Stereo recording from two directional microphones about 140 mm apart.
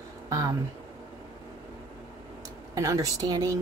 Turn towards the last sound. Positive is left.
turn(degrees=-25)  # may be behind; listen again after turning